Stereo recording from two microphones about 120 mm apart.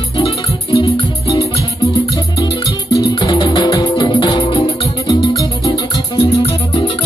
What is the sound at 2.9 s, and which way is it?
Music, 30° left (ahead or behind).